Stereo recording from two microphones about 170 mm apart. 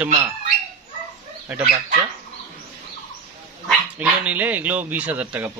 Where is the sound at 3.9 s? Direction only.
10° right (ahead or behind).